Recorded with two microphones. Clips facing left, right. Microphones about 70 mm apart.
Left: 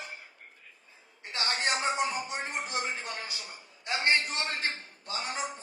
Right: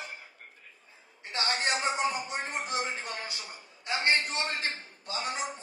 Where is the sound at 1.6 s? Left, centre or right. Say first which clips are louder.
Left 2 dB; left.